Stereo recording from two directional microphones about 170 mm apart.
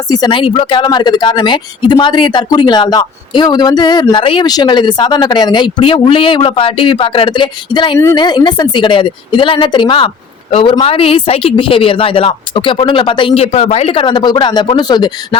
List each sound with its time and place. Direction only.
0.1 s a woman's voice: 25° left (ahead or behind)